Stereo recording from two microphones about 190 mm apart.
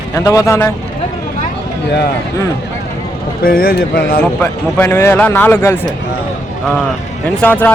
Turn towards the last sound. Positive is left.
turn(degrees=10)  # may be behind; listen again after turning